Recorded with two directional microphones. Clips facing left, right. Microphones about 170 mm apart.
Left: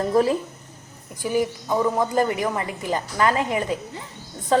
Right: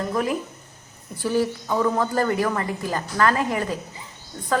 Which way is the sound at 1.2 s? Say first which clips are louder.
Even; 15° left (ahead or behind).